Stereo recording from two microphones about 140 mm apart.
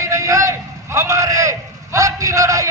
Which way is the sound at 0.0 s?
25° right (ahead or behind).